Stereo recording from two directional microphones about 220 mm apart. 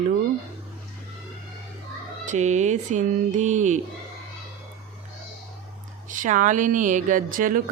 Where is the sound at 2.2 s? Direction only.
35° right (ahead or behind).